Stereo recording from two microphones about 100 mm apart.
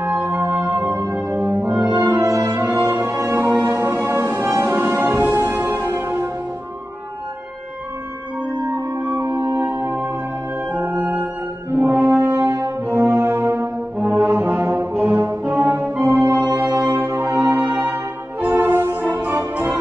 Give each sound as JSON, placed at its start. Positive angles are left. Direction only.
{"t": 0.0, "sound": "music", "side_deg": -20}
{"t": 1.5, "sound": "french horn", "side_deg": -35}
{"t": 2.0, "sound": "brass instrument", "side_deg": -30}
{"t": 2.9, "sound": "music", "side_deg": -20}
{"t": 8.7, "sound": "music", "side_deg": -35}
{"t": 10.7, "sound": "organ", "side_deg": -20}
{"t": 11.7, "sound": "brass instrument", "side_deg": -20}
{"t": 12.4, "sound": "brass instrument", "side_deg": -45}
{"t": 12.8, "sound": "brass instrument", "side_deg": -15}
{"t": 16.5, "sound": "music", "side_deg": -30}